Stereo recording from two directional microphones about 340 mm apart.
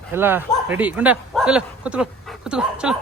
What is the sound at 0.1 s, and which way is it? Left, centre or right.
A man's voice, centre.